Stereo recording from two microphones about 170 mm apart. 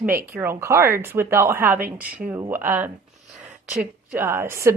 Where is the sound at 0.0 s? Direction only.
10° right (ahead or behind).